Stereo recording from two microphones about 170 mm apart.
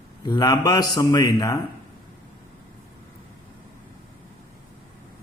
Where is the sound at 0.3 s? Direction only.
25° left (ahead or behind).